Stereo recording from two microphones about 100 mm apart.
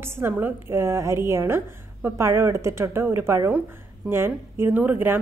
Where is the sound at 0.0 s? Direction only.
20° right (ahead or behind).